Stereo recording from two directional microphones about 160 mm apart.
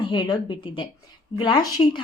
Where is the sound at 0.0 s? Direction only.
30° left (ahead or behind).